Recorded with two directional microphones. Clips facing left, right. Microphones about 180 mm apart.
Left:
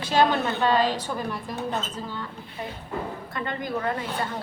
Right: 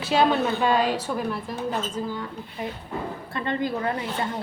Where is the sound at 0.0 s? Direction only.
5° right (ahead or behind).